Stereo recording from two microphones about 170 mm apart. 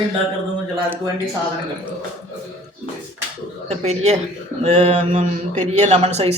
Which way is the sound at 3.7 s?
40° right (ahead or behind).